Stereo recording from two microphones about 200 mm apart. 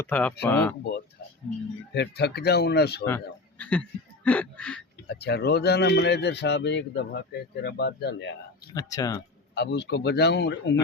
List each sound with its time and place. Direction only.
0.0 s speech: 10° left (ahead or behind)
1.9 s speech: 55° left (ahead or behind)
3.6 s speech: 5° left (ahead or behind)
5.0 s speech: 55° left (ahead or behind)
8.7 s speech: 15° left (ahead or behind)
9.6 s speech: 55° left (ahead or behind)